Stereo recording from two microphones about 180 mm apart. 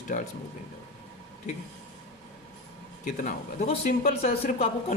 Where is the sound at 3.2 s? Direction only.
45° left (ahead or behind).